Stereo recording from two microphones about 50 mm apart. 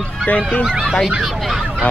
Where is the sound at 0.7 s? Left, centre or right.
Centre.